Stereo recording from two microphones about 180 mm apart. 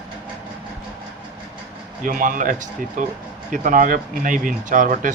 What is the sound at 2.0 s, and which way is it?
Speech, 50° right (ahead or behind).